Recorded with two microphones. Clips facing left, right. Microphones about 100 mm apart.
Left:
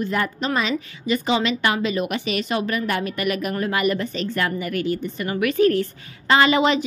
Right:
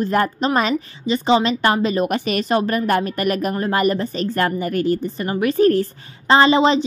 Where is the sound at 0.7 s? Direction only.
25° right (ahead or behind).